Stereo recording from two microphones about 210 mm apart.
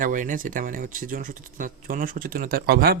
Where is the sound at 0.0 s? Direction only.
40° right (ahead or behind).